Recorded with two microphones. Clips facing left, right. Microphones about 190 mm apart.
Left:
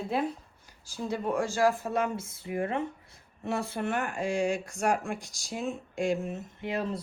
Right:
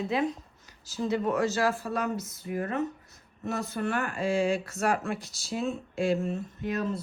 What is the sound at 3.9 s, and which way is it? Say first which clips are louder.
Speech: right 2 dB; 15° left (ahead or behind).